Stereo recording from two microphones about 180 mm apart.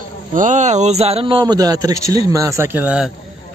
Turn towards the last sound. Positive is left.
turn(degrees=-10)  # may be behind; listen again after turning